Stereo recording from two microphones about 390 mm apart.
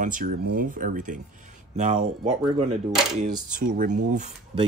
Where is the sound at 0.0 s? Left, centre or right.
Right.